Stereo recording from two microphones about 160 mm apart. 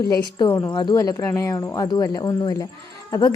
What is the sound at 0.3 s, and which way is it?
Speech, 25° left (ahead or behind).